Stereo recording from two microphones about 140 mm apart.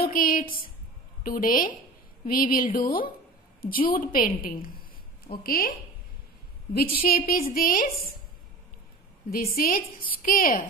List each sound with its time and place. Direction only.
0.0 s a woman's voice: 85° left
3.9 s a woman's voice: 80° left
6.7 s a woman's voice: 90° left
9.3 s a woman's voice: 90° left